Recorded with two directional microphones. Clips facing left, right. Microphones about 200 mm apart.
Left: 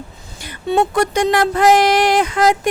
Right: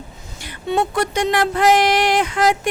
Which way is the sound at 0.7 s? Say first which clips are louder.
Left 4 dB; 40° left (ahead or behind).